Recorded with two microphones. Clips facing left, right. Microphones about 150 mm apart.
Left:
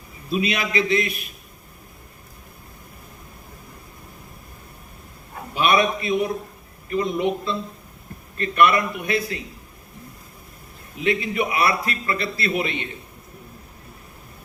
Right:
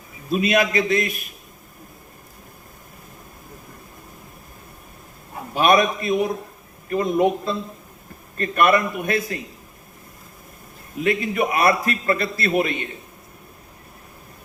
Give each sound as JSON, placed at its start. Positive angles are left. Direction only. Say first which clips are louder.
{"t": 0.3, "sound": "a man's voice", "louder": "right 5 dB", "side_deg": -45}
{"t": 5.5, "sound": "a man's voice", "louder": "right 2 dB", "side_deg": -45}
{"t": 10.9, "sound": "a man's voice", "louder": "right 1 dB", "side_deg": -45}